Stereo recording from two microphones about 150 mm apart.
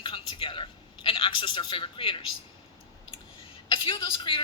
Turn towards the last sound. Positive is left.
turn(degrees=35)  # may be behind; listen again after turning